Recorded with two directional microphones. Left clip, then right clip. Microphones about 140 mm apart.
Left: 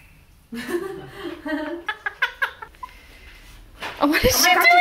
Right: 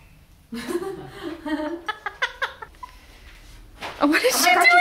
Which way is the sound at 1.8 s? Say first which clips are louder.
Left 2 dB; 25° right (ahead or behind).